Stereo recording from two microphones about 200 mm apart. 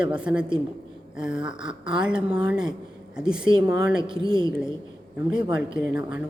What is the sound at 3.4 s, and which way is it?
A woman's voice, 25° right (ahead or behind).